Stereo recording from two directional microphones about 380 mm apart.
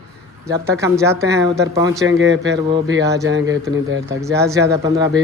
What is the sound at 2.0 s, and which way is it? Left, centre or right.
Speech, right.